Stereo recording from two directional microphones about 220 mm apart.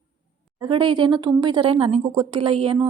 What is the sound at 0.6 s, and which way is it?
A woman's voice, 20° right (ahead or behind).